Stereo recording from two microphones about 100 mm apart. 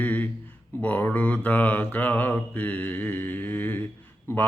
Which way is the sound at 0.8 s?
15° left (ahead or behind).